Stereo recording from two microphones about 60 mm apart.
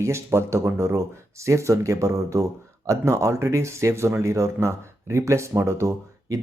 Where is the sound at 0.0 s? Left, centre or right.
Right.